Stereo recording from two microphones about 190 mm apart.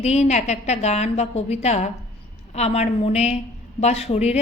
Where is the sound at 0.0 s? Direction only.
35° left (ahead or behind).